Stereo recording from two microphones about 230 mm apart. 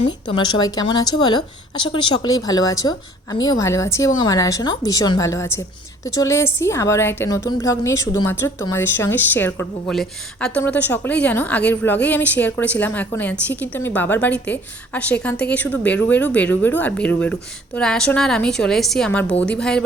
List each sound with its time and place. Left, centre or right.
0.0 s a woman's voice: left; by 19.8 s centre